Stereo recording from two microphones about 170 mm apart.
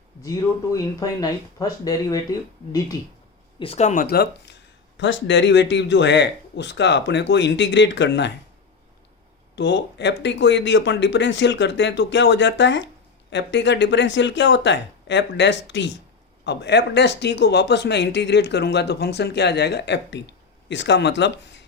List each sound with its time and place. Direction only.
0.2 s speech: 20° left (ahead or behind)
3.6 s speech: 40° left (ahead or behind)
4.1 s speech: 75° left (ahead or behind)
4.9 s speech: 90° left
9.6 s speech: 90° left